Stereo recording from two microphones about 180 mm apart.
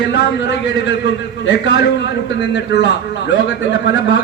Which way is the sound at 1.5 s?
85° left.